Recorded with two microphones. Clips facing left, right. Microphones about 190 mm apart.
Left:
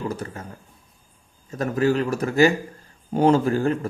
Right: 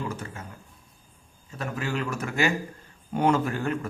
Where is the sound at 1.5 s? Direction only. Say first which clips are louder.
Left 11 dB; 40° left (ahead or behind).